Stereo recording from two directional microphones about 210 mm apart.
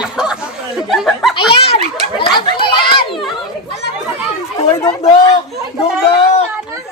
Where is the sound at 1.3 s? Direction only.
25° left (ahead or behind).